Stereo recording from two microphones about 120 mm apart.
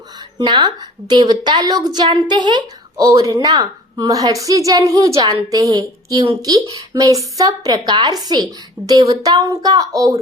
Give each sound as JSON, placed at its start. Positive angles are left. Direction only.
{"t": 0.3, "sound": "a woman's voice", "side_deg": -35}
{"t": 3.0, "sound": "a woman's voice", "side_deg": -25}